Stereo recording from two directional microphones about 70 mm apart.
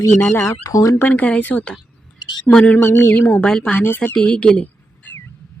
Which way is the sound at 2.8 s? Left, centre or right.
Left.